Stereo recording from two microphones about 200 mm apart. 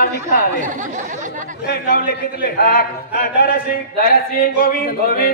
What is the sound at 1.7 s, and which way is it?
A man's voice, 45° left (ahead or behind).